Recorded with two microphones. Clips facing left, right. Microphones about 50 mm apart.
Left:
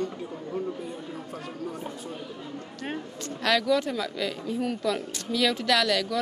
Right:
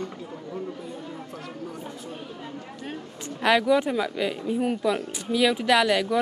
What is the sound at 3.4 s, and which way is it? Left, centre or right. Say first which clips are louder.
A woman's voice: right 3 dB; right.